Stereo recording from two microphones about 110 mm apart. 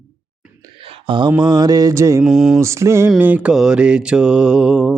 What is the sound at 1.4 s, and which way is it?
Music, 40° right (ahead or behind).